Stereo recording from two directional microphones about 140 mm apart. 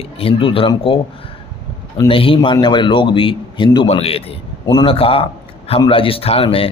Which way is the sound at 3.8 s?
45° left (ahead or behind).